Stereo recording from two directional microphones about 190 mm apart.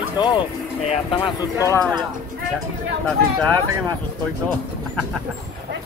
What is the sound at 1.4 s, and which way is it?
Speech, 15° left (ahead or behind).